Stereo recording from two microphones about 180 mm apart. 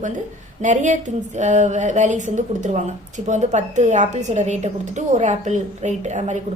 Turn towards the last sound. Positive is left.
turn(degrees=-40)  # may be behind; listen again after turning